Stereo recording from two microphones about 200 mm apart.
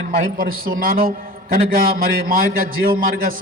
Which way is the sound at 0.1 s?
40° right (ahead or behind).